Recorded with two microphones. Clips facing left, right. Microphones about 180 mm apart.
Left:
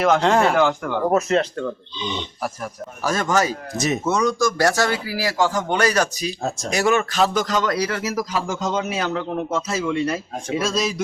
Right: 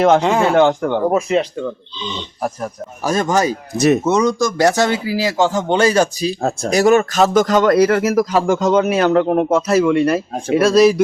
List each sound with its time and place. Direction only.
0.2 s speech: 5° right (ahead or behind)
0.7 s speech: 35° right (ahead or behind)
1.1 s speech: 10° right (ahead or behind)
2.0 s speech: 15° left (ahead or behind)
3.0 s speech: 20° right (ahead or behind)
3.8 s speech: 60° right (ahead or behind)
4.0 s speech: 20° right (ahead or behind); by 11.0 s 65° right (ahead or behind)